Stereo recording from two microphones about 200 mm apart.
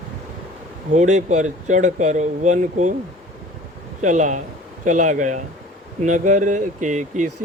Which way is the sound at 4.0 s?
40° right (ahead or behind).